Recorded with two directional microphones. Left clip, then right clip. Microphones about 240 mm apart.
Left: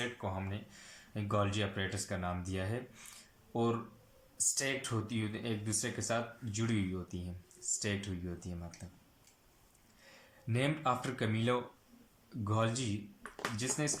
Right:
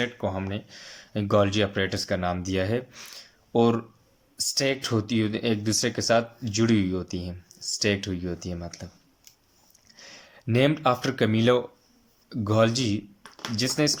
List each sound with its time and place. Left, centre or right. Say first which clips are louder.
0.0 s speech: right 11 dB; right
10.0 s speech: right 12 dB; right